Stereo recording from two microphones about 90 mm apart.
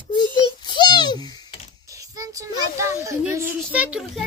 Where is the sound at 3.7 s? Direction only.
15° right (ahead or behind).